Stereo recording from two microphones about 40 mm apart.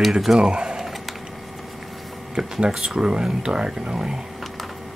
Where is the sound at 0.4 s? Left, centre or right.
Centre.